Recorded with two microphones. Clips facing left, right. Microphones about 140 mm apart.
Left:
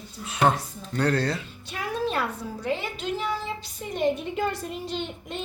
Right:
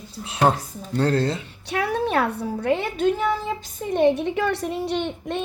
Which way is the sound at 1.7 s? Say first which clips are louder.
Right 6 dB; 70° right (ahead or behind).